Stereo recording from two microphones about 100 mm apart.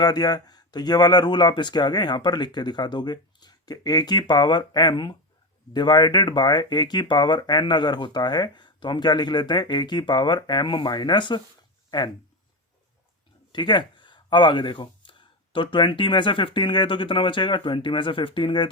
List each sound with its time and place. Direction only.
0.0 s speech: 45° left (ahead or behind)
13.5 s speech: 50° left (ahead or behind)